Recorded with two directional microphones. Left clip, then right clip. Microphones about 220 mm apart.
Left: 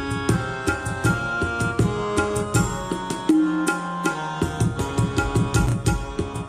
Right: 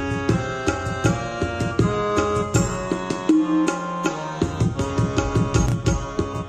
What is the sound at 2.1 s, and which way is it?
Music, 20° left (ahead or behind).